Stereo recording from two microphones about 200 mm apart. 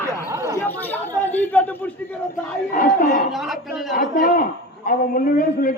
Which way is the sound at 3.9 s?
40° left (ahead or behind).